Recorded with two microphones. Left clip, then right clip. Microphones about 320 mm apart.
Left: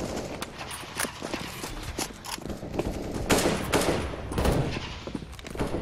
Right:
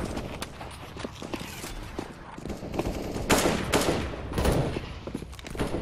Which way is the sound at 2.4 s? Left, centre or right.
Centre.